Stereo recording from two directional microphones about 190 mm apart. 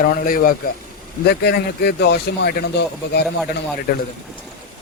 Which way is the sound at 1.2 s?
60° left (ahead or behind).